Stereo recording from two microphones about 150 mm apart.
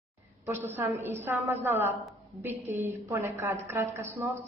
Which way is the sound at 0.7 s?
15° right (ahead or behind).